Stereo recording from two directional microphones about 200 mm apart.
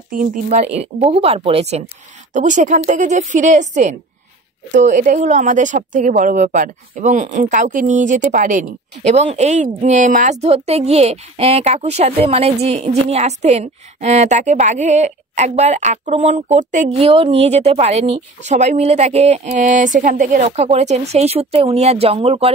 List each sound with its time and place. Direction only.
0.1 s a woman's voice: 40° right (ahead or behind)